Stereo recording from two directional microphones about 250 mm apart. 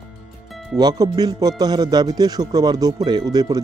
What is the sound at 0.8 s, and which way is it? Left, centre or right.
Speech, centre.